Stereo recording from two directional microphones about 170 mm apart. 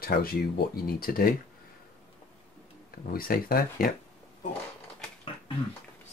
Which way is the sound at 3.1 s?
60° left (ahead or behind).